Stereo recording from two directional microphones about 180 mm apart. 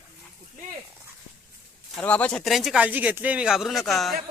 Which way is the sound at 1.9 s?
5° left (ahead or behind).